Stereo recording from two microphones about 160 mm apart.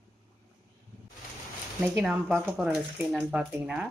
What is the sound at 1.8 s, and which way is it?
Speech, 10° right (ahead or behind).